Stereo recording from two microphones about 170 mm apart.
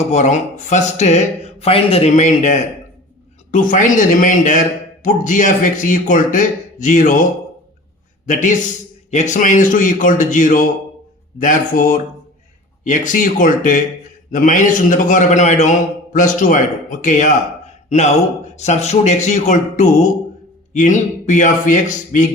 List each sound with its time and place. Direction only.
0.1 s speech: 45° left (ahead or behind)
8.3 s speech: 50° left (ahead or behind)